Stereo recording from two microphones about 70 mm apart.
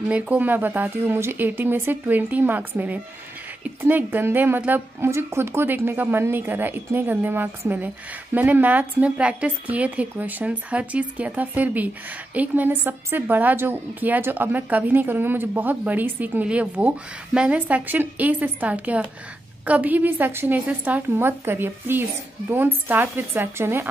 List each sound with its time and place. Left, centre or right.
0.3 s a woman's voice: right
3.6 s a woman's voice: right
5.0 s a woman's voice: right